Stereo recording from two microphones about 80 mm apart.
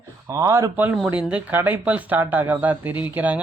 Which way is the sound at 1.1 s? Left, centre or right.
Centre.